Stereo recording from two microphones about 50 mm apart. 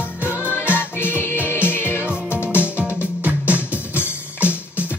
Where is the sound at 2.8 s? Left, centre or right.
Left.